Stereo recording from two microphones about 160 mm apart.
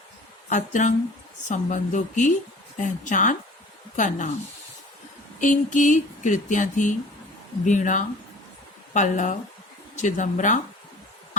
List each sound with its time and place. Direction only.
0.5 s speech: 50° left (ahead or behind)
5.4 s speech: 50° left (ahead or behind)